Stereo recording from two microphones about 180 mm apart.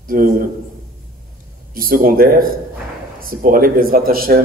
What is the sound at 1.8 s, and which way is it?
Speech, 55° right (ahead or behind).